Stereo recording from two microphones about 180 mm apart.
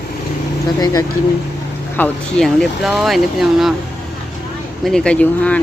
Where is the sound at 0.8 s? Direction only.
20° left (ahead or behind).